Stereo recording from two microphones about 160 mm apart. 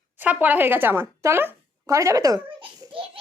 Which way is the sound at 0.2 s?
10° right (ahead or behind).